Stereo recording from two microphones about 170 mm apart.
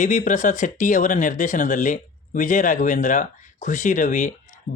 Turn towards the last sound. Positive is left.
turn(degrees=45)  # may be behind; listen again after turning